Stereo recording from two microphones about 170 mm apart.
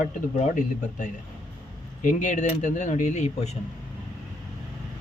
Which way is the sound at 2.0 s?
45° left (ahead or behind).